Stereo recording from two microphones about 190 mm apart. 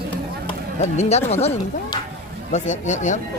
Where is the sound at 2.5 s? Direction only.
40° left (ahead or behind).